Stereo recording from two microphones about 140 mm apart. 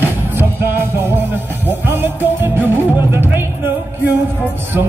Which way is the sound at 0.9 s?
15° right (ahead or behind).